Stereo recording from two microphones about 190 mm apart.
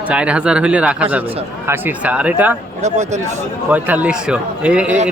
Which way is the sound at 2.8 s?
35° right (ahead or behind).